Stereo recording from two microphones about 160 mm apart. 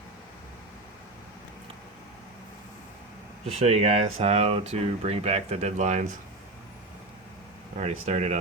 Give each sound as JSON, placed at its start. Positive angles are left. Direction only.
{"t": 3.6, "sound": "speech", "side_deg": -40}
{"t": 7.8, "sound": "speech", "side_deg": -45}